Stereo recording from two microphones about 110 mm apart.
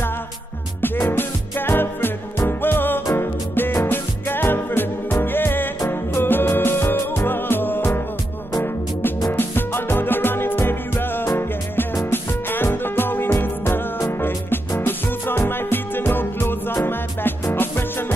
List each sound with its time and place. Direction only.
0.8 s music: 20° left (ahead or behind)
9.3 s music: 20° left (ahead or behind)